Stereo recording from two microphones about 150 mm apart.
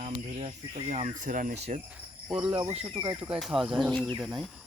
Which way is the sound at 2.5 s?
25° right (ahead or behind).